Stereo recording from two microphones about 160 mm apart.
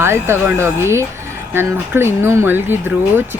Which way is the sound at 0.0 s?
15° right (ahead or behind).